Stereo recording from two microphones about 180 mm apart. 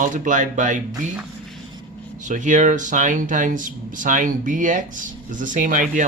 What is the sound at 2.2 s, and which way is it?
Speech, 45° right (ahead or behind).